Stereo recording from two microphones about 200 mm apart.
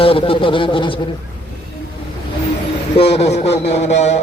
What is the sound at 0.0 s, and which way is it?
Speech, 25° left (ahead or behind).